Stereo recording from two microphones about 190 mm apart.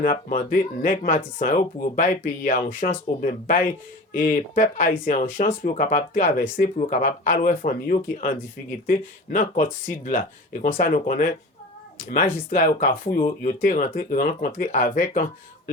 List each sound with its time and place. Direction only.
0.0 s speech: 45° left (ahead or behind)